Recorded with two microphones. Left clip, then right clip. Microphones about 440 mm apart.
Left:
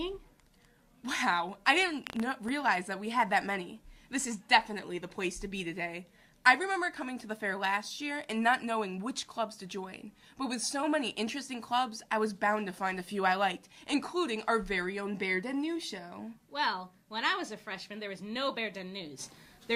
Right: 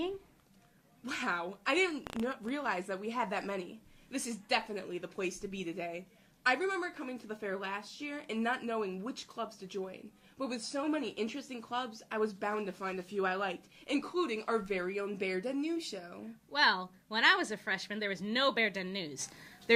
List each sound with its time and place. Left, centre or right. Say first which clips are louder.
1.0 s a woman's voice: left 5 dB; left
16.5 s a woman's voice: right 4 dB; right